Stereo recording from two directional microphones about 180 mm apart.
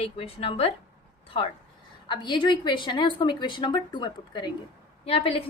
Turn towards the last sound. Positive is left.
turn(degrees=30)  # may be behind; listen again after turning